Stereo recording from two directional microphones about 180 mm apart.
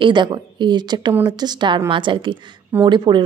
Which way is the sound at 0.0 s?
25° right (ahead or behind).